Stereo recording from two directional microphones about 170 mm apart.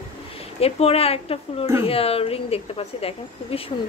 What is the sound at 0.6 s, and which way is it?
Speech, 35° left (ahead or behind).